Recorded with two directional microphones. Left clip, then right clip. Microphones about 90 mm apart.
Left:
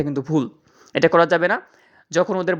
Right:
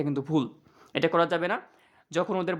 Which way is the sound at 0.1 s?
35° left (ahead or behind).